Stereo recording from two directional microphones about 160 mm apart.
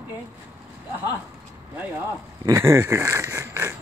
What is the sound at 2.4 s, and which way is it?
Speech, 15° right (ahead or behind).